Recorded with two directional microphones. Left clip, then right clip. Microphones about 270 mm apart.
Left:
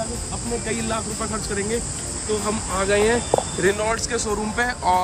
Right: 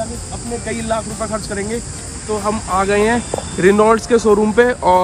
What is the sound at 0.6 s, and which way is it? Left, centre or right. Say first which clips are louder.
Speech: right 8 dB; centre.